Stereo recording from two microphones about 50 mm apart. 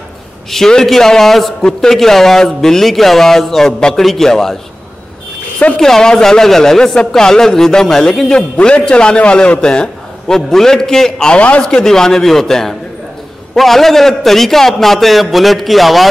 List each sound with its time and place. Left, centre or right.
0.5 s speech: centre
5.8 s speech: centre
8.5 s speech: centre
11.3 s speech: left
11.6 s a man's voice: centre